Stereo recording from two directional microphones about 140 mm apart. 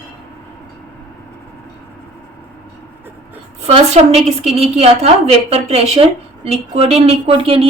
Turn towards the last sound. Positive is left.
turn(degrees=-40)  # may be behind; listen again after turning